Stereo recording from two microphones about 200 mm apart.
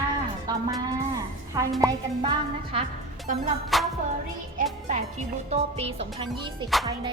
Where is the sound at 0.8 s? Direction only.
15° right (ahead or behind).